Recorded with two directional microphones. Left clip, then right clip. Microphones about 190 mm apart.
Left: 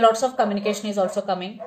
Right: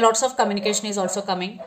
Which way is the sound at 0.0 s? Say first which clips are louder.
Even; 45° right (ahead or behind).